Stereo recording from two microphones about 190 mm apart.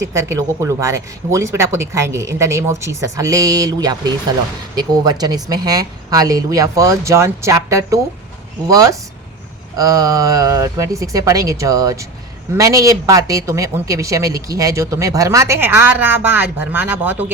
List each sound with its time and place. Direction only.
0.1 s speech: 15° right (ahead or behind)